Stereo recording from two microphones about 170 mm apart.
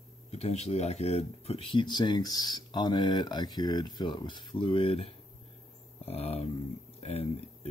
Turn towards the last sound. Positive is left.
turn(degrees=35)  # may be behind; listen again after turning